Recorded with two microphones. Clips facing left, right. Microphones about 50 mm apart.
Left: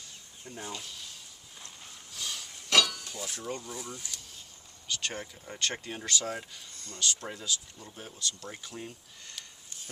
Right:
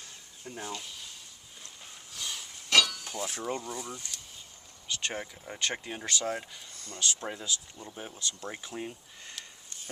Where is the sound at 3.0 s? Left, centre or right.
Centre.